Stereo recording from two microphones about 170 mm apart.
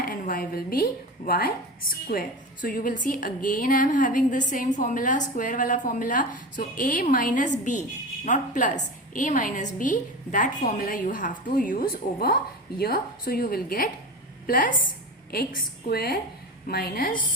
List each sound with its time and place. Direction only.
0.0 s a woman's voice: 55° left (ahead or behind)